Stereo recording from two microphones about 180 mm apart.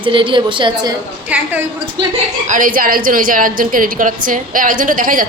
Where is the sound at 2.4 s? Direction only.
45° right (ahead or behind).